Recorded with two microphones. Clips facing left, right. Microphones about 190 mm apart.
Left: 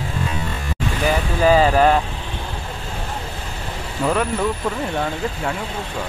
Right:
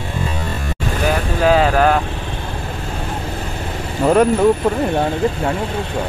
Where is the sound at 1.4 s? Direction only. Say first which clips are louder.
Even; 5° left (ahead or behind).